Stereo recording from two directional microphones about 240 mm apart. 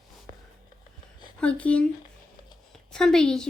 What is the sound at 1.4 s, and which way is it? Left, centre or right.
Speech, centre.